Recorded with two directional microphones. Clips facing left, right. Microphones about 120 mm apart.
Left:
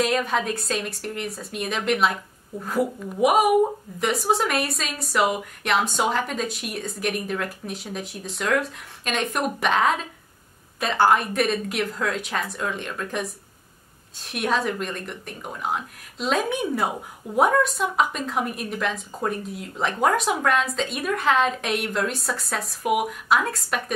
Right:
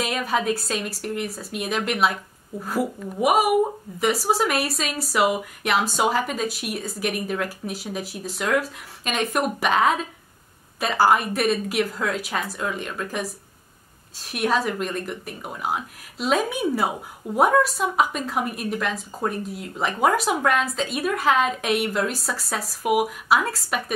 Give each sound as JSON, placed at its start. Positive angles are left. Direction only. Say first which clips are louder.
{"t": 0.0, "sound": "a woman's voice", "louder": "left 1 dB", "side_deg": -5}